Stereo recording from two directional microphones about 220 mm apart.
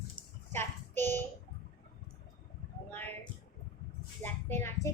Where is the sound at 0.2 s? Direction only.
10° left (ahead or behind).